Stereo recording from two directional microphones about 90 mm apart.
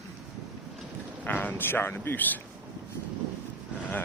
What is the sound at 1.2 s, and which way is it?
Speech, 20° left (ahead or behind).